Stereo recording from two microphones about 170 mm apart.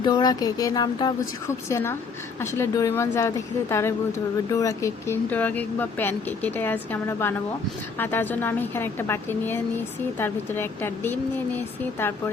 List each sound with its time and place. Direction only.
0.0 s a woman's voice: 25° left (ahead or behind)